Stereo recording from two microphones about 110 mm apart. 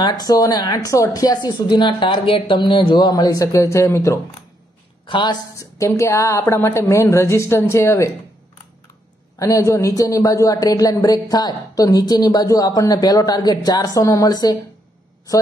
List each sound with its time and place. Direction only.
0.0 s speech: 35° left (ahead or behind)
5.0 s a woman's voice: 45° left (ahead or behind)
5.6 s a woman's voice: 25° left (ahead or behind)
9.4 s speech: 30° left (ahead or behind)